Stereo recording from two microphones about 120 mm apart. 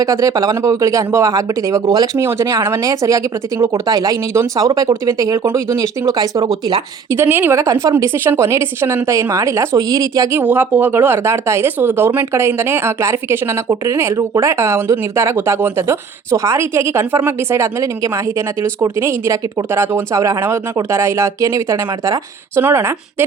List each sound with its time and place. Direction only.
0.0 s speech: 30° right (ahead or behind)
10.4 s speech: 15° right (ahead or behind)